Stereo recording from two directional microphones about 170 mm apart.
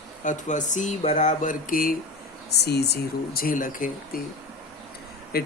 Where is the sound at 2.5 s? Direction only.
75° left (ahead or behind); by 4.2 s 55° left (ahead or behind).